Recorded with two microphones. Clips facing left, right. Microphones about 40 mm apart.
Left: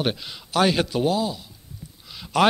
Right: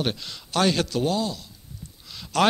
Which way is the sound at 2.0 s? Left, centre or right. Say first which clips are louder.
Left 2 dB; centre.